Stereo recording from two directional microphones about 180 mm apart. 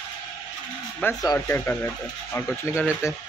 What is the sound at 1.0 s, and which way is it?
Speech, 15° left (ahead or behind).